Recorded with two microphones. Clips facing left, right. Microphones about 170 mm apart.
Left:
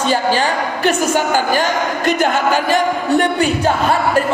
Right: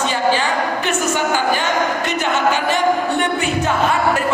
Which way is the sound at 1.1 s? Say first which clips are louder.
Left 3 dB; 40° left (ahead or behind).